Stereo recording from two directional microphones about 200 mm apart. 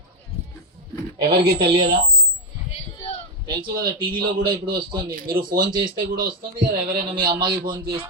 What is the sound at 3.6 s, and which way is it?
Speech, 50° right (ahead or behind).